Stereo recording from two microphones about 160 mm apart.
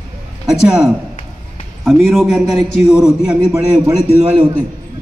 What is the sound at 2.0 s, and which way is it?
A man's voice, centre (ahead or behind).